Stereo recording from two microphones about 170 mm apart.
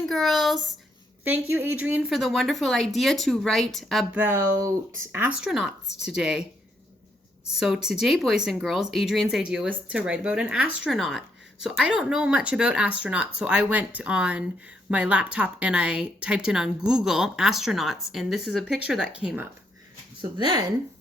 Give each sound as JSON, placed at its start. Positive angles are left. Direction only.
{"t": 0.0, "sound": "a sound", "side_deg": 0}
{"t": 1.2, "sound": "speech", "side_deg": -10}
{"t": 4.2, "sound": "speech", "side_deg": -15}
{"t": 7.5, "sound": "speech", "side_deg": -5}
{"t": 20.4, "sound": "speech", "side_deg": -25}